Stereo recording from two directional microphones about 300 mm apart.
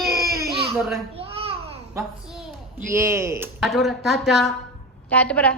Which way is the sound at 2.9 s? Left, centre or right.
Centre.